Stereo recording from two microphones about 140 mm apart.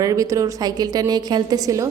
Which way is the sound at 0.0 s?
25° right (ahead or behind).